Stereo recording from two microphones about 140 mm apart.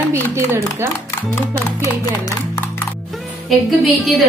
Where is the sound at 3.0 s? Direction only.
Centre (ahead or behind).